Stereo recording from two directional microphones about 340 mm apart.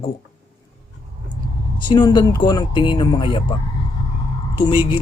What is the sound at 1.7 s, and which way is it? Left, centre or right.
Speech, centre.